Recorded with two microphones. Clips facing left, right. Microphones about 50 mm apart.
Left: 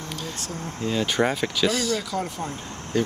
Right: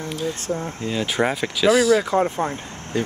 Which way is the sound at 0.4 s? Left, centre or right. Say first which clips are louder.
Right 7 dB; right.